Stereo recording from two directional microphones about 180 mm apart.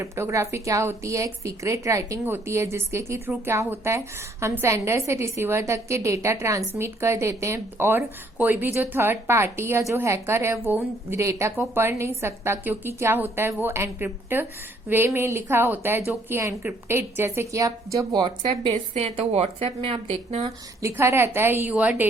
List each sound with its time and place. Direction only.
0.0 s a woman's voice: 15° right (ahead or behind)
18.7 s a woman's voice: 35° right (ahead or behind)
20.8 s a woman's voice: 15° right (ahead or behind)